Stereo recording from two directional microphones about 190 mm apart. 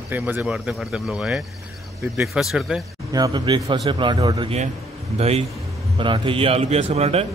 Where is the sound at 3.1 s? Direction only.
20° right (ahead or behind).